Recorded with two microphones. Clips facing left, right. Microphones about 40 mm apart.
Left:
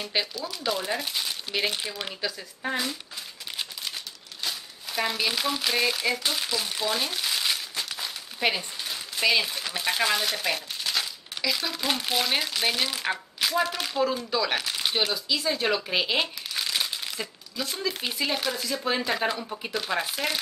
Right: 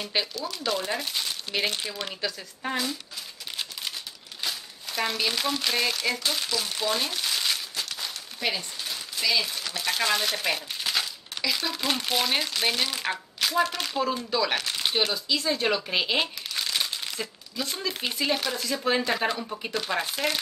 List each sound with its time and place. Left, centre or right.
0.0 s speech: centre
4.4 s crumpling: centre; by 8.6 s left
9.2 s speech: left
10.0 s speech: centre